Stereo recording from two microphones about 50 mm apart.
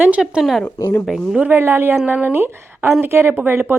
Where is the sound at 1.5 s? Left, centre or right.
Right.